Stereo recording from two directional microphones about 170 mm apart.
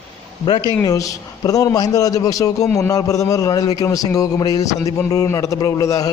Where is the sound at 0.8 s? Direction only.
20° left (ahead or behind).